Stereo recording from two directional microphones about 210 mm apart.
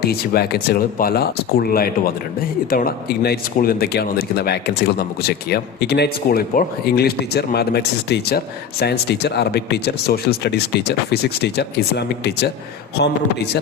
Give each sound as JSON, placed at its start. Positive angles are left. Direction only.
{"t": 0.0, "sound": "speech", "side_deg": 50}